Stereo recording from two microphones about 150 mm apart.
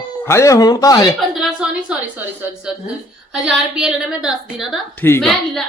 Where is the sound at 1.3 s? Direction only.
5° right (ahead or behind).